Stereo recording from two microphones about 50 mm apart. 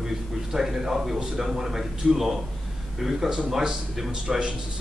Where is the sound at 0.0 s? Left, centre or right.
Centre.